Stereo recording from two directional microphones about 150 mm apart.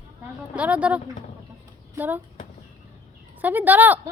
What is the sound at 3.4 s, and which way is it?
Speech, 10° right (ahead or behind).